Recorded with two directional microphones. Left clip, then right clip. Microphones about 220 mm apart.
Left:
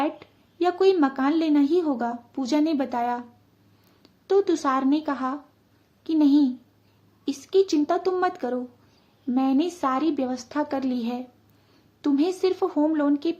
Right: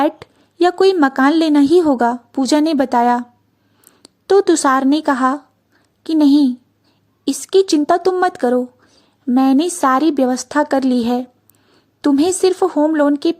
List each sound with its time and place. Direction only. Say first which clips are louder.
0.0 s a woman's voice: right 10 dB; 45° right (ahead or behind)